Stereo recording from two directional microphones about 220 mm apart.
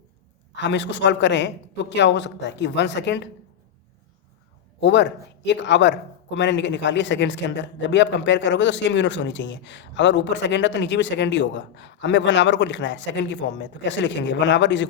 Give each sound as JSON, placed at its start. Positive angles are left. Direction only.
{"t": 0.5, "sound": "a man's voice", "side_deg": 55}
{"t": 4.8, "sound": "a man's voice", "side_deg": 50}